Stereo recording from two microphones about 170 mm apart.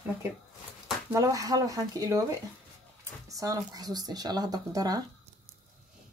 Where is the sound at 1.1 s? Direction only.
20° right (ahead or behind).